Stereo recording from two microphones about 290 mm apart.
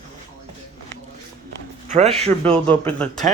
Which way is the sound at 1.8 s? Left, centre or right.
Right.